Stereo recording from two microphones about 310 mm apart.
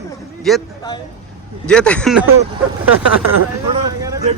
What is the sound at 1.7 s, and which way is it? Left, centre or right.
Speech, centre.